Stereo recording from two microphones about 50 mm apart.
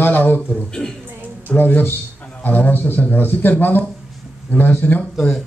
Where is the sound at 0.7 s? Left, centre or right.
Centre.